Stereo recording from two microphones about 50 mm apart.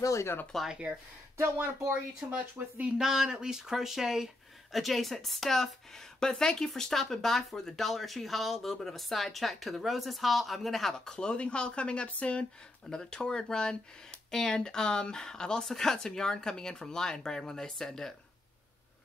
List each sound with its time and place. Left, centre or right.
0.0 s speech: left
2.1 s speech: right
3.0 s speech: centre
11.1 s speech: centre
12.9 s speech: centre